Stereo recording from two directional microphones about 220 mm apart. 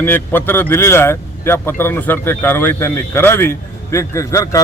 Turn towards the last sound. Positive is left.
turn(degrees=15)  # may be behind; listen again after turning